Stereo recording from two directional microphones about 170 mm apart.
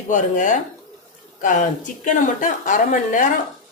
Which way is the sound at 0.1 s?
50° left (ahead or behind).